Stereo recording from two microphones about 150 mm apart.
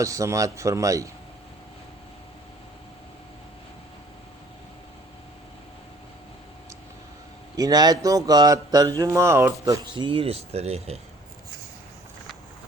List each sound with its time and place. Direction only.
0.0 s speech: 20° right (ahead or behind)
7.5 s speech: 25° right (ahead or behind); by 11.0 s 45° right (ahead or behind)